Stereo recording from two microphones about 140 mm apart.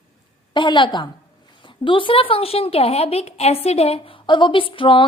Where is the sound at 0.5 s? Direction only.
35° left (ahead or behind).